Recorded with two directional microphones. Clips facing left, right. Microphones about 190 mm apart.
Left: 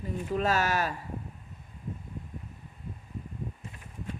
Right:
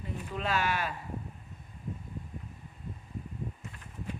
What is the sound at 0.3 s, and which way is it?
Speech, 40° left (ahead or behind).